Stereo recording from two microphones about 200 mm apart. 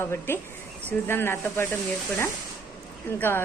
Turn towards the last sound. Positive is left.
turn(degrees=10)  # may be behind; listen again after turning